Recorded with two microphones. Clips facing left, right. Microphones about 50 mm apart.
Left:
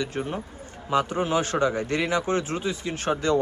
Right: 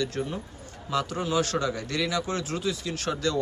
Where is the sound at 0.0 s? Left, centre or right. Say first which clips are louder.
Left 1 dB; left.